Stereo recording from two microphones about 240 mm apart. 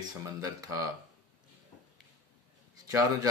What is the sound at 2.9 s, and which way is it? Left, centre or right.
Speech, centre.